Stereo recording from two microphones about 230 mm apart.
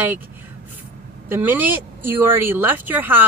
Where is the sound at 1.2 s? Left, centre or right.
Centre.